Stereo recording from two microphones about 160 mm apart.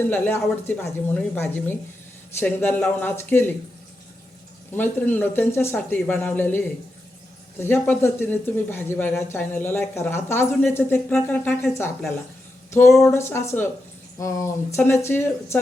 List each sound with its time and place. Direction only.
0.8 s speech: 10° left (ahead or behind)
4.7 s speech: 10° left (ahead or behind)